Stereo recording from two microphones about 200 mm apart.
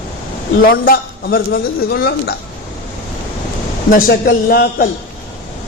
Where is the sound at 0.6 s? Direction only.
50° left (ahead or behind).